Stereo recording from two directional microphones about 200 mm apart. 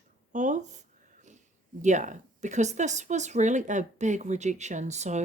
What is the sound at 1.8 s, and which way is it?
Speech, 35° right (ahead or behind).